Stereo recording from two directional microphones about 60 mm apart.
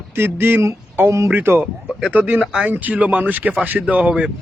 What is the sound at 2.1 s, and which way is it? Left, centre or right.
Speech, right.